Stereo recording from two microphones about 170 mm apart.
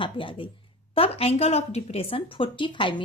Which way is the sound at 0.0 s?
30° left (ahead or behind).